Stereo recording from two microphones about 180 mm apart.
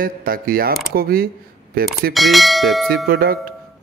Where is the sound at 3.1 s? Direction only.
55° right (ahead or behind).